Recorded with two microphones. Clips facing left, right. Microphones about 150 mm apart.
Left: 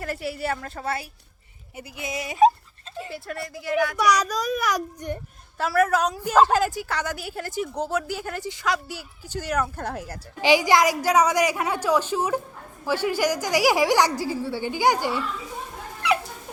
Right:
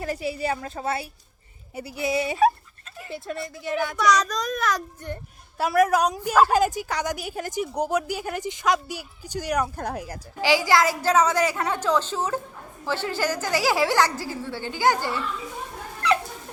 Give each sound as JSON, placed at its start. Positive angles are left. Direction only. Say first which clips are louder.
{"t": 0.0, "sound": "a woman's voice", "louder": "right 2 dB", "side_deg": -15}
{"t": 1.7, "sound": "speech", "louder": "right 7 dB", "side_deg": -35}
{"t": 3.9, "sound": "a woman's voice", "louder": "even", "side_deg": 10}
{"t": 5.5, "sound": "a woman's voice", "louder": "right 1 dB", "side_deg": -15}
{"t": 10.4, "sound": "a woman's voice", "louder": "left 2 dB", "side_deg": 20}